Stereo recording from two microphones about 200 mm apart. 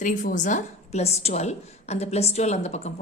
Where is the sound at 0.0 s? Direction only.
40° left (ahead or behind).